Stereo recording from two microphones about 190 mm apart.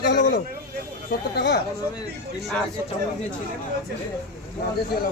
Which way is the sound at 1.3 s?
65° left (ahead or behind).